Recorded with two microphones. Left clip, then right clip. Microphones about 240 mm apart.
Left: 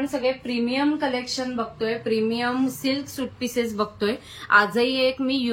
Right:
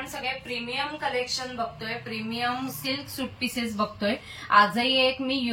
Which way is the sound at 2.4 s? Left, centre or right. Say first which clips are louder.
Left 4 dB; left.